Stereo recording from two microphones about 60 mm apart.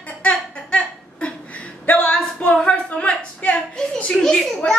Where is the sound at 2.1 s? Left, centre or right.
Centre.